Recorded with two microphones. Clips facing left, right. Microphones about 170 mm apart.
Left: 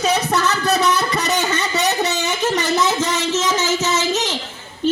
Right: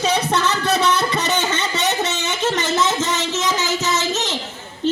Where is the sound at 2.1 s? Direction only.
25° right (ahead or behind).